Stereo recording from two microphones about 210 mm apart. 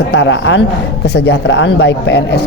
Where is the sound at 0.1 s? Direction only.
55° left (ahead or behind).